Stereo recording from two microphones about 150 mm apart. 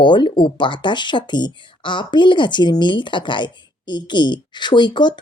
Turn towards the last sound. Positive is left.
turn(degrees=30)  # may be behind; listen again after turning